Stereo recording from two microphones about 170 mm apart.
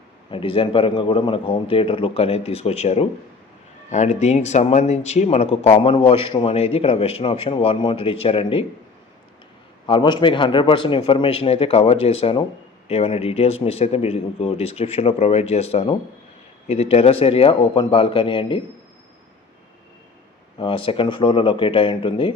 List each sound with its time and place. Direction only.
0.3 s speech: 30° left (ahead or behind)
9.8 s speech: 30° left (ahead or behind)
20.6 s speech: 30° left (ahead or behind)